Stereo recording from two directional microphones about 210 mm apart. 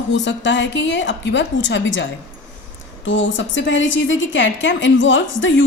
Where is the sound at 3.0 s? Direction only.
60° left (ahead or behind).